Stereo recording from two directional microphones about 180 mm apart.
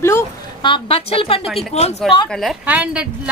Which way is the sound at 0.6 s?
25° left (ahead or behind).